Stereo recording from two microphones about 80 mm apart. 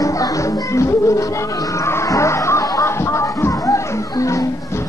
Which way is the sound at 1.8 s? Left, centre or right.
Left.